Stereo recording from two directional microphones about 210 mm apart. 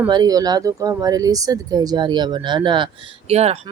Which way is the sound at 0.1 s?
20° right (ahead or behind).